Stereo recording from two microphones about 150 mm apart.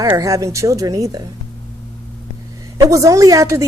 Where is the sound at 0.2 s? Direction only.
25° right (ahead or behind).